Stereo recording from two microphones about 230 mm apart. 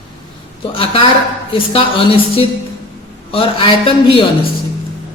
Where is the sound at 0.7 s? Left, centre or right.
Left.